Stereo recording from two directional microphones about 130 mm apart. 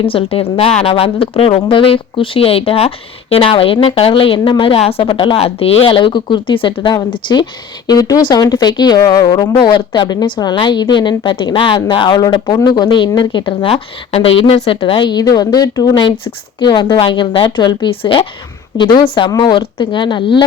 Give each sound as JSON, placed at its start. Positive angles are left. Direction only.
{"t": 0.0, "sound": "a woman's voice", "side_deg": 45}